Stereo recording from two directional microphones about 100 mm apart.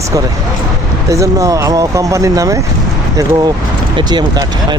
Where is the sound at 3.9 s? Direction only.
45° right (ahead or behind).